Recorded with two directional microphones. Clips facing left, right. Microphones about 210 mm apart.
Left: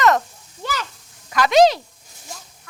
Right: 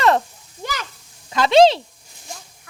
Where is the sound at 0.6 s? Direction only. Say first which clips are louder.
Left 1 dB; 15° right (ahead or behind).